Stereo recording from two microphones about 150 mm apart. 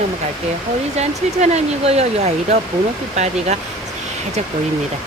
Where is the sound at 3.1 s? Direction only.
50° right (ahead or behind).